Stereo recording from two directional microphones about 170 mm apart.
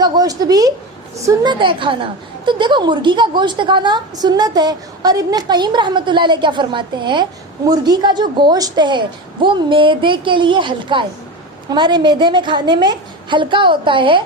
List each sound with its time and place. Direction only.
0.0 s a woman's voice: 25° right (ahead or behind)